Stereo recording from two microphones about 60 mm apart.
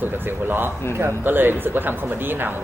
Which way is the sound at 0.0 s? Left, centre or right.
Right.